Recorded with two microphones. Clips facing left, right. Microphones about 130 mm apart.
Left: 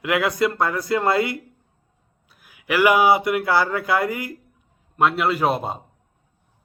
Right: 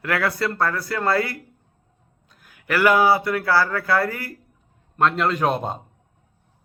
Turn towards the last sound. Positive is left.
turn(degrees=5)  # may be behind; listen again after turning